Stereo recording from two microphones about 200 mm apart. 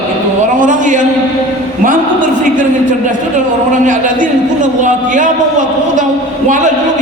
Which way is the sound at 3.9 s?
40° right (ahead or behind).